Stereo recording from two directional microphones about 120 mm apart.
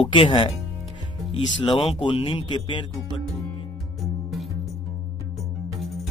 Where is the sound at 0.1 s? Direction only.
40° left (ahead or behind).